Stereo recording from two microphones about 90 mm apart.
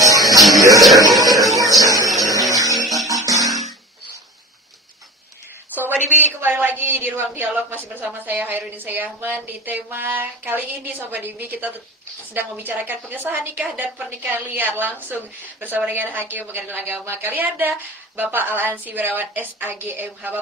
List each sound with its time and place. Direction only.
0.0 s music: 40° right (ahead or behind)
0.6 s speech: 40° right (ahead or behind)
0.9 s music: 40° right (ahead or behind)
2.5 s a sound: 40° right (ahead or behind)
3.1 s music: 40° right (ahead or behind)
5.8 s a woman's voice: 20° right (ahead or behind)